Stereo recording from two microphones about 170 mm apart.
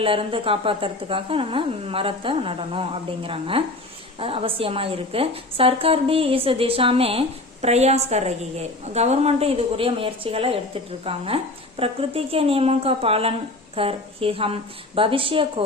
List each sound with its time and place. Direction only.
0.0 s a woman's voice: 30° right (ahead or behind)